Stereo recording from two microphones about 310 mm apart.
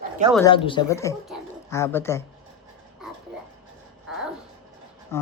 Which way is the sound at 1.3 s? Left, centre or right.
Centre.